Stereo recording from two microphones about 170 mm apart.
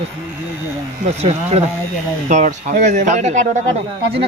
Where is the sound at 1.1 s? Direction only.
40° right (ahead or behind).